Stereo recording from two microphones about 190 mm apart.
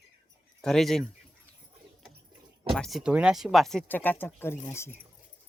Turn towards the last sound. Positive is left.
turn(degrees=15)  # may be behind; listen again after turning